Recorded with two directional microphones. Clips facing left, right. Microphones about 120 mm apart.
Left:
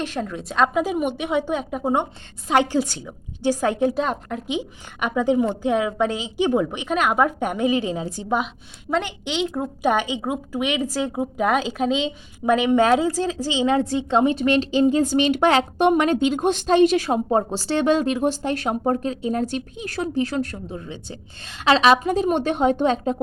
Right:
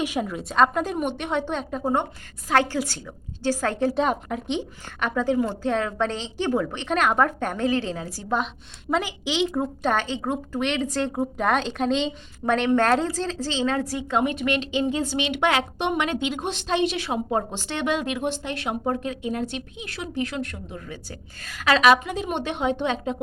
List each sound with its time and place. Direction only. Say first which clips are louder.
0.0 s a woman's voice: right 1 dB; 10° right (ahead or behind); by 3.8 s 15° left (ahead or behind)
3.8 s a woman's voice: left 1 dB; centre (ahead or behind); by 8.4 s 20° left (ahead or behind)
8.9 s a woman's voice: left 1 dB; 5° right (ahead or behind)
9.8 s a woman's voice: left 5 dB; 15° left (ahead or behind); by 20.8 s 35° left (ahead or behind)
20.8 s a woman's voice: left 3 dB; 25° left (ahead or behind); by 23.1 s 40° left (ahead or behind)